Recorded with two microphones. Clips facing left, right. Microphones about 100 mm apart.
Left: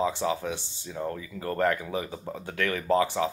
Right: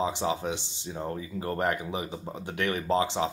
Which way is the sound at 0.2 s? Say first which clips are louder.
Even; 25° right (ahead or behind).